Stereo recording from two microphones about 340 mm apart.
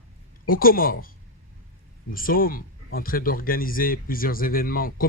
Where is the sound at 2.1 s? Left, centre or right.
Left.